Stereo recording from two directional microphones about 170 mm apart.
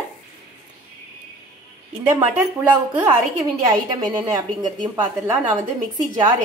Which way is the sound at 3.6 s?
20° right (ahead or behind).